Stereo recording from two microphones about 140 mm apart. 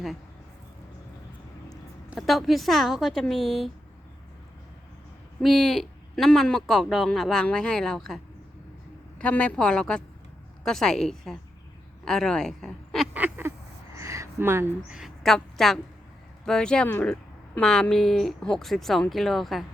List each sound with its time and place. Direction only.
2.1 s speech: centre (ahead or behind)
5.4 s speech: centre (ahead or behind)
13.1 s honk: 15° right (ahead or behind)
13.9 s a sound: 20° right (ahead or behind)
14.9 s a woman's voice: centre (ahead or behind)